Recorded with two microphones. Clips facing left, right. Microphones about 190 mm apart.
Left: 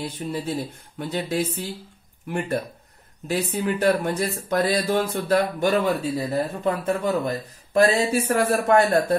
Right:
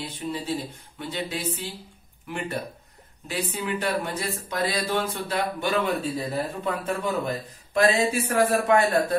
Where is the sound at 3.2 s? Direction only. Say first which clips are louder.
Left 5 dB; 45° left (ahead or behind).